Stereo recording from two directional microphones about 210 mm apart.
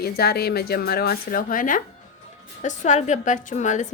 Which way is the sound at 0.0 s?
50° left (ahead or behind).